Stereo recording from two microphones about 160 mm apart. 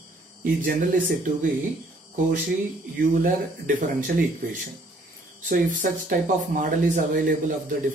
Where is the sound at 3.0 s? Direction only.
55° right (ahead or behind).